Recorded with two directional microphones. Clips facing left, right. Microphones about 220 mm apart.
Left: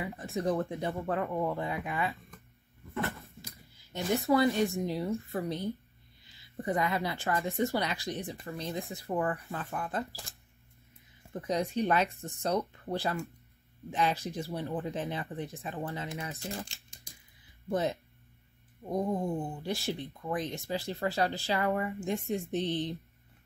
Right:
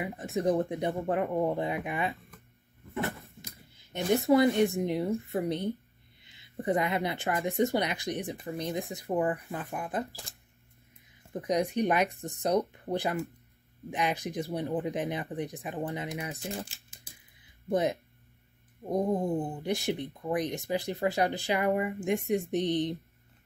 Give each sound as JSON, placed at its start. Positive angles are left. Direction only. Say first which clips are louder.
{"t": 0.0, "sound": "speech", "louder": "right 3 dB", "side_deg": -15}
{"t": 2.9, "sound": "a sound", "louder": "right 2 dB", "side_deg": -15}
{"t": 4.3, "sound": "speech", "louder": "right 3 dB", "side_deg": -20}
{"t": 11.3, "sound": "speech", "louder": "right 3 dB", "side_deg": -15}
{"t": 17.6, "sound": "speech", "louder": "right 3 dB", "side_deg": -15}